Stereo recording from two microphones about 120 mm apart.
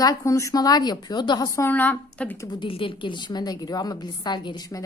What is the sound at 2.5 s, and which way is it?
A woman's voice, 45° left (ahead or behind).